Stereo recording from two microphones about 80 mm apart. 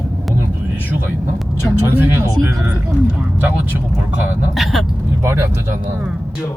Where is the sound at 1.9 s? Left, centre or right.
Right.